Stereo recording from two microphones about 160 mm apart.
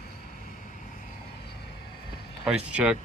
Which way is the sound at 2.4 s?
10° right (ahead or behind).